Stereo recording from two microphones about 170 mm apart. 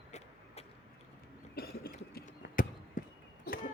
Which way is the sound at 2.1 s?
55° left (ahead or behind).